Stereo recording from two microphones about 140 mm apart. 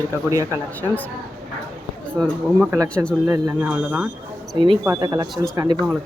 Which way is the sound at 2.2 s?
5° left (ahead or behind).